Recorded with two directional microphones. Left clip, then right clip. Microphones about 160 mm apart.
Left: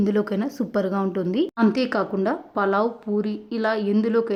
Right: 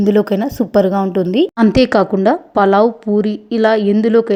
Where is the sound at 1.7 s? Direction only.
35° right (ahead or behind).